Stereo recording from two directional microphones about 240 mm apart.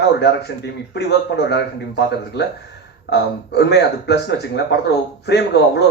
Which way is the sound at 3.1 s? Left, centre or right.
Left.